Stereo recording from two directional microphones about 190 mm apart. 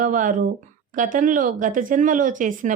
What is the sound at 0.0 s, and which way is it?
Speech, 45° right (ahead or behind).